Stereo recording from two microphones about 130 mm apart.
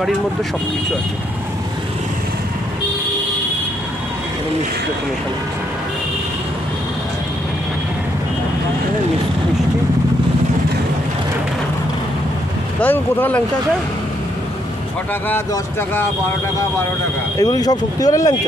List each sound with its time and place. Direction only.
12.8 s speech: 15° left (ahead or behind)
17.4 s speech: 30° left (ahead or behind)